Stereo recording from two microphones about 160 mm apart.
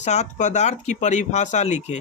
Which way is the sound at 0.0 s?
45° left (ahead or behind).